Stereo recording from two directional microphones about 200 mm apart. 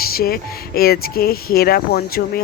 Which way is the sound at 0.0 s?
50° left (ahead or behind).